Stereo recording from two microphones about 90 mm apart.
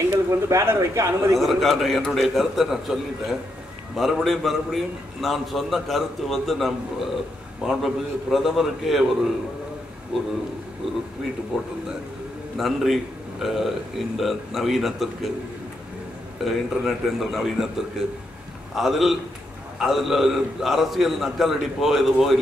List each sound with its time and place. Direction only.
0.3 s speech: 30° right (ahead or behind)
1.3 s a man's voice: centre (ahead or behind)
11.5 s a man's voice: 5° right (ahead or behind)
16.4 s a man's voice: 5° right (ahead or behind)